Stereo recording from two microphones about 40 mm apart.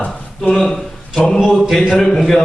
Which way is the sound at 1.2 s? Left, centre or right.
Centre.